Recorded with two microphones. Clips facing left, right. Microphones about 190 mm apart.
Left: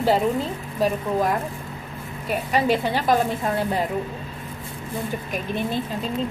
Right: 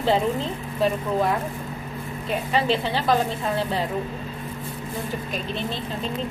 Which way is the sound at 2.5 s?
10° left (ahead or behind).